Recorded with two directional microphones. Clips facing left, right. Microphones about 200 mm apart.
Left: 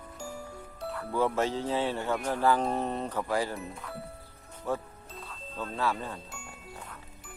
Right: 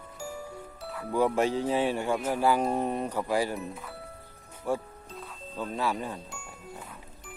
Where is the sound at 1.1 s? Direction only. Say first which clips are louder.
Right 3 dB; 15° right (ahead or behind).